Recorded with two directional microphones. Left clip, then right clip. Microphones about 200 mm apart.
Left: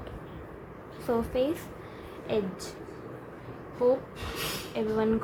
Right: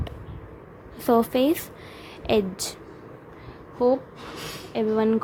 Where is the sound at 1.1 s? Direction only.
50° right (ahead or behind).